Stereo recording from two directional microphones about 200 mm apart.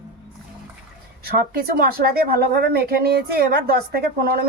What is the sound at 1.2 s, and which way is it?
Speech, 50° right (ahead or behind).